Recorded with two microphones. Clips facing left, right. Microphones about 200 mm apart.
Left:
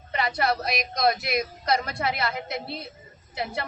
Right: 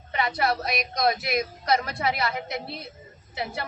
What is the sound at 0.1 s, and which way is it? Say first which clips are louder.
Speech: even; centre (ahead or behind).